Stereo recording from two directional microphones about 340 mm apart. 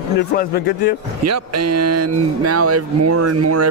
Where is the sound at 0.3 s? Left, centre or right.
Left.